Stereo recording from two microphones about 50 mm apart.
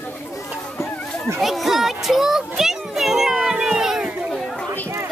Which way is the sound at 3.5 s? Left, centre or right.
Centre.